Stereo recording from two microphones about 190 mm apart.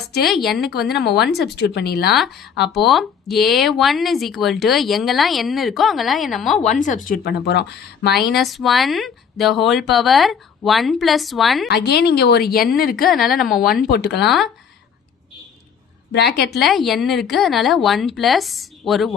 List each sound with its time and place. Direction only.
0.3 s speech: centre (ahead or behind)
0.9 s speech: 60° left (ahead or behind)
2.1 s speech: centre (ahead or behind)
6.6 s speech: 40° left (ahead or behind); by 8.3 s 60° left (ahead or behind)
8.3 s speech: centre (ahead or behind)
11.7 s a woman's voice: 55° left (ahead or behind)
13.1 s speech: centre (ahead or behind)
13.9 s speech: 60° left (ahead or behind)
14.3 s speech: centre (ahead or behind)
16.1 s speech: 60° left (ahead or behind)
16.5 s speech: centre (ahead or behind)